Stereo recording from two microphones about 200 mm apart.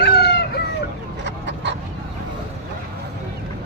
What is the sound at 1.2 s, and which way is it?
Duck, 60° right (ahead or behind).